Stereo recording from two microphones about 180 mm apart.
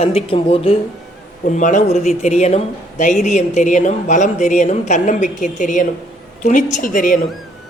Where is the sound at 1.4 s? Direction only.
45° left (ahead or behind).